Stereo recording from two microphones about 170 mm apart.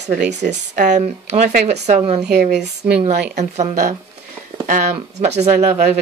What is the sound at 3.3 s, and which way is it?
Speech, 40° right (ahead or behind).